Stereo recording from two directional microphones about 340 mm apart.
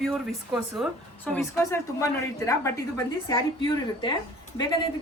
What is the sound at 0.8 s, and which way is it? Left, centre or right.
A woman's voice, centre.